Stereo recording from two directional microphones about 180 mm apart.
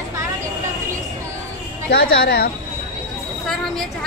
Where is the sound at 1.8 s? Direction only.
60° left (ahead or behind).